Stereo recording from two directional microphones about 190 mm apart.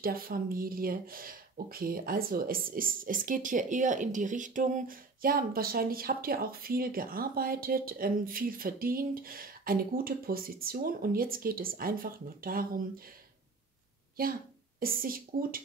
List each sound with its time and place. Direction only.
0.0 s speech: 50° right (ahead or behind)
14.2 s speech: 50° right (ahead or behind)